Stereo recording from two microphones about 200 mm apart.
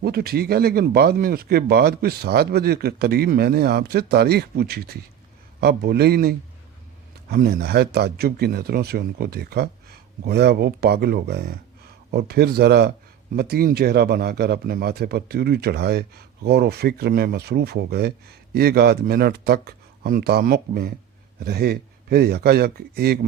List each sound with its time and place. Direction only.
0.0 s speech: 50° right (ahead or behind)